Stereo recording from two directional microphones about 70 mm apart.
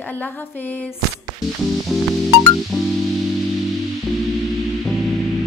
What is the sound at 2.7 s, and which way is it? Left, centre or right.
Music, centre.